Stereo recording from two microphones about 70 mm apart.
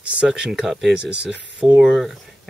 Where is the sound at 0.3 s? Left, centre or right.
Centre.